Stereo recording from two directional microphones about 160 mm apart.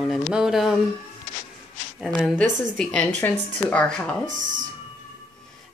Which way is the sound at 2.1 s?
5° left (ahead or behind).